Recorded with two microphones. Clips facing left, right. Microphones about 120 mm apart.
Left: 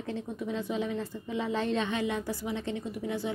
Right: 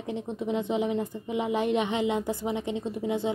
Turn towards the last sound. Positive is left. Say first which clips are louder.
# right 5 dB
turn(degrees=-20)  # may be behind; listen again after turning